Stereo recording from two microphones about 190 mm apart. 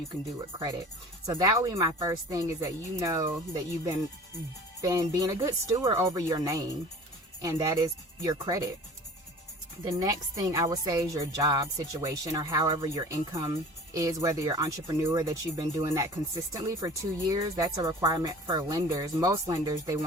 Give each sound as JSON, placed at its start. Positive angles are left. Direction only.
{"t": 1.3, "sound": "speech", "side_deg": -20}
{"t": 9.8, "sound": "a woman's voice", "side_deg": -20}